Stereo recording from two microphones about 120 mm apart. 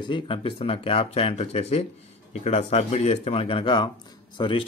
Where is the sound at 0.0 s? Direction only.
45° left (ahead or behind).